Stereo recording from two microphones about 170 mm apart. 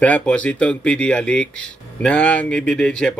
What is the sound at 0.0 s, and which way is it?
Speech, 5° left (ahead or behind).